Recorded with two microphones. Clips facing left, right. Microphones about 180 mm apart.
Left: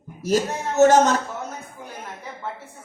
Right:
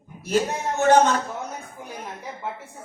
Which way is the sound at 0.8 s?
40° left (ahead or behind).